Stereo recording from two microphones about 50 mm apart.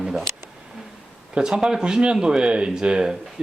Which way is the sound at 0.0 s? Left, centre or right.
Centre.